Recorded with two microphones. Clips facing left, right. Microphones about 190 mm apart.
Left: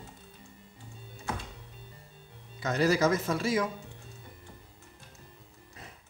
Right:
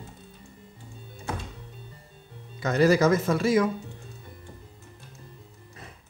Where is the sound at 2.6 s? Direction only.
60° right (ahead or behind).